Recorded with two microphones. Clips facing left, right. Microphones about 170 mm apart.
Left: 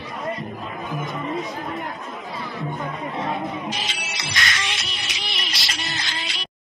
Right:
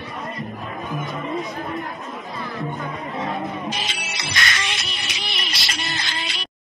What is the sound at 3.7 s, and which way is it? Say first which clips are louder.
Music: right 1 dB; 55° right (ahead or behind).